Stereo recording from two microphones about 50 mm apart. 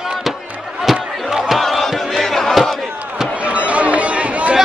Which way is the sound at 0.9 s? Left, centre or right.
Centre.